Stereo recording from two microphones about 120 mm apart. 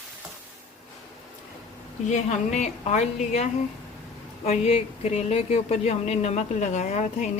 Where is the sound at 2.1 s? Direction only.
85° left.